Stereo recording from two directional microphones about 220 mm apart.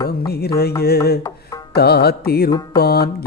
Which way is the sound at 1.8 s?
45° left (ahead or behind).